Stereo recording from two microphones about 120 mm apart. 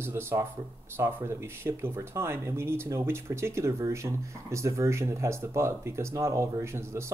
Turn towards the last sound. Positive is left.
turn(degrees=-25)  # may be behind; listen again after turning